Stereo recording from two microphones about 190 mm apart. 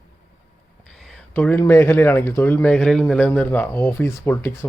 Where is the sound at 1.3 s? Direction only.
10° left (ahead or behind).